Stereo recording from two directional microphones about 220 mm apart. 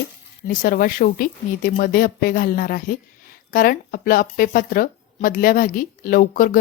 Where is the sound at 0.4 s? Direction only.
40° left (ahead or behind).